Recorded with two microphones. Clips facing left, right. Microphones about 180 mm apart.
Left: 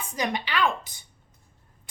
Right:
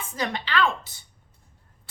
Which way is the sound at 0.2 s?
15° left (ahead or behind).